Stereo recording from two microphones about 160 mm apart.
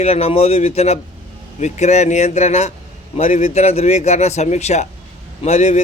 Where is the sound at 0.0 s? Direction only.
40° left (ahead or behind).